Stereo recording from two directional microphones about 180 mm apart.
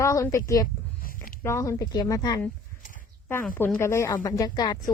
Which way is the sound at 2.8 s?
50° left (ahead or behind).